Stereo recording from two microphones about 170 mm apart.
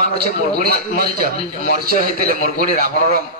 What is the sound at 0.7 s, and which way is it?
A man's voice, 60° right (ahead or behind).